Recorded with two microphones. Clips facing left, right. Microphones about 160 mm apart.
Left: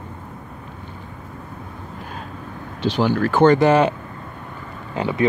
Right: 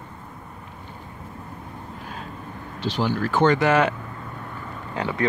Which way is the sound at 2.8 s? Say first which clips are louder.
Left 5 dB; 65° left (ahead or behind).